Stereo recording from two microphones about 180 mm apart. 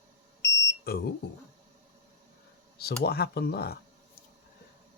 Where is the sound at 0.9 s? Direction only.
60° left (ahead or behind).